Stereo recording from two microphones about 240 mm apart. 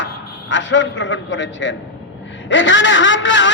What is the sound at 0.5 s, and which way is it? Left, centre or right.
A man's voice, left.